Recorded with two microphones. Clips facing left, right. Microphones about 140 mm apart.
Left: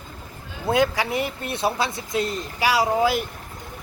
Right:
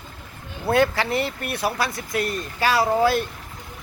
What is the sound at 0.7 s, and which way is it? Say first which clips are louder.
Speech: right 1 dB; 15° left (ahead or behind).